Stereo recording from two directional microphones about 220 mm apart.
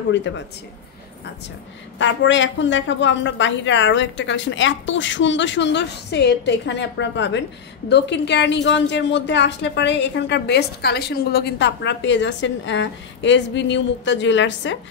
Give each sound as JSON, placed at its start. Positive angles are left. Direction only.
{"t": 0.1, "sound": "a woman's voice", "side_deg": 55}
{"t": 2.0, "sound": "a woman's voice", "side_deg": 55}